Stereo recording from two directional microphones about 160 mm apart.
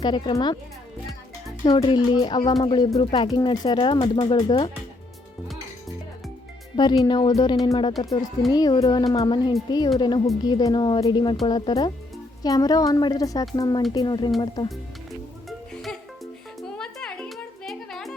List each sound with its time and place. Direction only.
0.0 s speech: 30° left (ahead or behind)
1.6 s speech: 30° left (ahead or behind)
7.0 s speech: 25° left (ahead or behind)
15.4 s music: centre (ahead or behind)